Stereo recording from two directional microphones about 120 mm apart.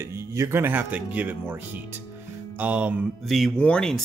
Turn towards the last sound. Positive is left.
turn(degrees=5)  # may be behind; listen again after turning